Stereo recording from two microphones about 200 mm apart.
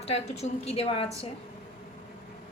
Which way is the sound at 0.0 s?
35° left (ahead or behind).